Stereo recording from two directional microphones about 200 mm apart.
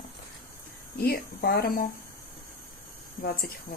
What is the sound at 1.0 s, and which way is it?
Speech, 50° left (ahead or behind).